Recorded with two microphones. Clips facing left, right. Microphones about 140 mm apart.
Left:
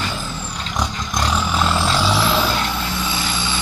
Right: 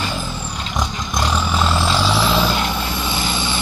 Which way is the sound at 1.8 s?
Centre (ahead or behind).